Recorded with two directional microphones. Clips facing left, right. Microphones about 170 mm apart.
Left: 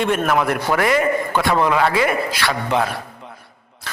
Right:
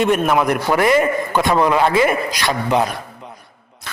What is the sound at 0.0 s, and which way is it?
A man's voice, 20° right (ahead or behind).